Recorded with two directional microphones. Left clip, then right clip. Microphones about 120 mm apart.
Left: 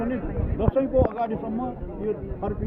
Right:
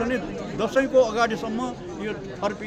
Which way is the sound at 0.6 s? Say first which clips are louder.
Right 3 dB; 15° right (ahead or behind).